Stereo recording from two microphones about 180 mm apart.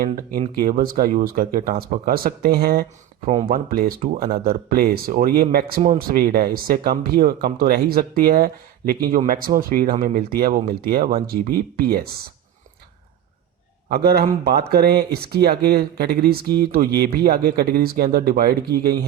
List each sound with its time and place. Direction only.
0.0 s speech: 55° right (ahead or behind)
13.9 s speech: 60° right (ahead or behind)